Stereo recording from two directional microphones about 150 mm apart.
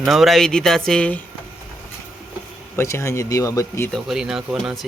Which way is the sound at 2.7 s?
20° left (ahead or behind).